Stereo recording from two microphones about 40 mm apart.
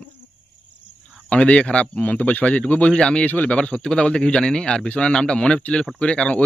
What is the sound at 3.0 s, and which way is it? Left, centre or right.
Speech, left.